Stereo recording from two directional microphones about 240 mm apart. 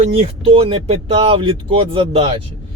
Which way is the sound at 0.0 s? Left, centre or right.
Right.